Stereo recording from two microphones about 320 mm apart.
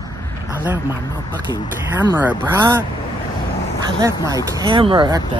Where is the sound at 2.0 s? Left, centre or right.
Centre.